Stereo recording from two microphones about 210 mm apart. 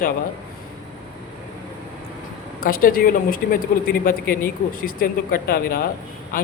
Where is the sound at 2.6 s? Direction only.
45° left (ahead or behind).